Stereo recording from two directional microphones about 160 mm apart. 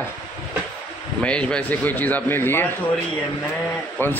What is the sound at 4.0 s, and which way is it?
Speech, 15° left (ahead or behind).